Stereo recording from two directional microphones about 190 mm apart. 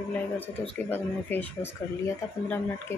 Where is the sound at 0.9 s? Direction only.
10° left (ahead or behind).